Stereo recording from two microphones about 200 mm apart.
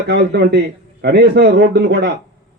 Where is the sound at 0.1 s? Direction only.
55° right (ahead or behind).